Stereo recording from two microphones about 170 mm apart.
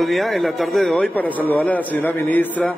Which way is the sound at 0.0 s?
Centre (ahead or behind).